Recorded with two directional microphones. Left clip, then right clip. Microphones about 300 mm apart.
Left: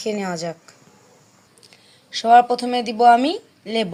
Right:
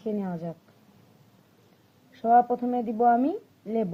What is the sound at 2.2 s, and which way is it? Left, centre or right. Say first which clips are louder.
Speech: left 7 dB; centre.